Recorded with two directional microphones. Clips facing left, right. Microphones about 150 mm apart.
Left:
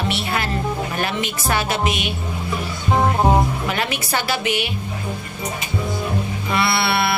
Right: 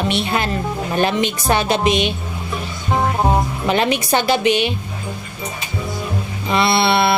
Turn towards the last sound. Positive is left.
turn(degrees=-25)  # may be behind; listen again after turning